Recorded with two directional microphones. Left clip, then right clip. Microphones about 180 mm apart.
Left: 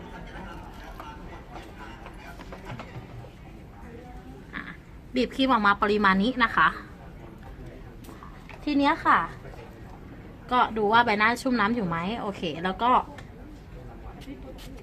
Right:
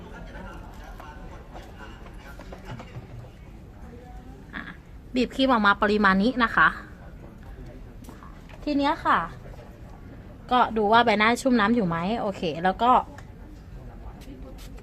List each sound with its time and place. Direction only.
4.5 s a sound: 50° right (ahead or behind)
5.1 s a woman's voice: 55° right (ahead or behind)
8.8 s a woman's voice: 45° right (ahead or behind)
10.5 s a woman's voice: 55° right (ahead or behind)